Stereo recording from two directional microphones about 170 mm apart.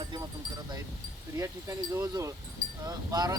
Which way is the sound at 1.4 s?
20° right (ahead or behind).